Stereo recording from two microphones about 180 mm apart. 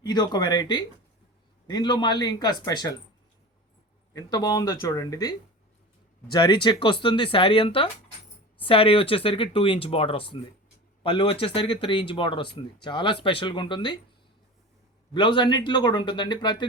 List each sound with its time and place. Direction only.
0.0 s speech: 25° left (ahead or behind)
4.1 s speech: 20° left (ahead or behind)
6.3 s speech: 25° left (ahead or behind)
15.1 s speech: 25° left (ahead or behind)